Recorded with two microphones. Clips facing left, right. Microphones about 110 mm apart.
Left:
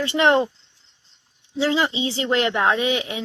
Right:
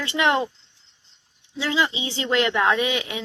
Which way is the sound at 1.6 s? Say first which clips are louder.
Left 3 dB; 35° left (ahead or behind).